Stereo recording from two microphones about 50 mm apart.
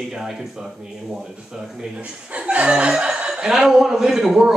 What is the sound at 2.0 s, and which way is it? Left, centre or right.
A man's voice, right.